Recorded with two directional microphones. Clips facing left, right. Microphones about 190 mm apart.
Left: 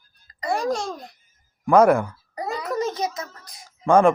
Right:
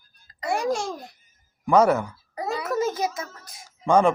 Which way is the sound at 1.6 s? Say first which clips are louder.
Left 3 dB; 10° left (ahead or behind).